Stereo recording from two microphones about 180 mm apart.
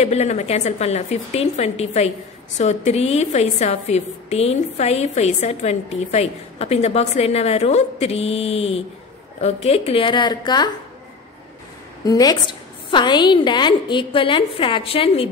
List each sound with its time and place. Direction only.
0.0 s a woman's voice: 35° left (ahead or behind)
12.0 s a woman's voice: 20° left (ahead or behind)